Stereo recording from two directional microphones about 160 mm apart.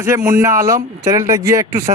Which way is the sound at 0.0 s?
20° right (ahead or behind).